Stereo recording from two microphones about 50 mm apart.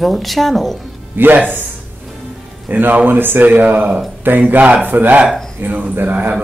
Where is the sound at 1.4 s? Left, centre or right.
Right.